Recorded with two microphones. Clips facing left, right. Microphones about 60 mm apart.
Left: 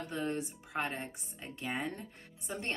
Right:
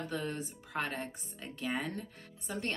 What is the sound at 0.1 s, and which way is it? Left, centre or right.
Speech, left.